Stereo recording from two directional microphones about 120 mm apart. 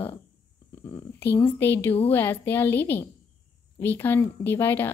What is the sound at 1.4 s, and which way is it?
Speech, 20° left (ahead or behind).